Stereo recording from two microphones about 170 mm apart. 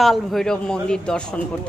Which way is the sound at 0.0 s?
Centre (ahead or behind).